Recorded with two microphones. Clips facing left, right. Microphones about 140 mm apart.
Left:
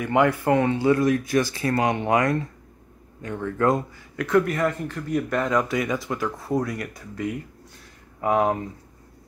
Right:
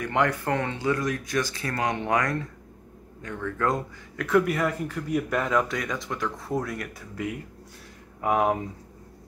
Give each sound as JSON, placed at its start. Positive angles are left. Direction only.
{"t": 0.0, "sound": "speech", "side_deg": 10}
{"t": 0.8, "sound": "speech", "side_deg": 30}
{"t": 1.8, "sound": "speech", "side_deg": 15}
{"t": 4.2, "sound": "speech", "side_deg": -5}